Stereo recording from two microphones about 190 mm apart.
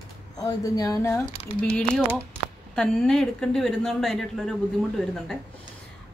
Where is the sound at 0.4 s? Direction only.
20° left (ahead or behind).